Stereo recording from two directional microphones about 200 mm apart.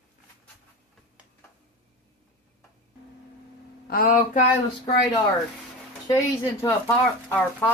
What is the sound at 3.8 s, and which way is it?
Speech, 45° left (ahead or behind).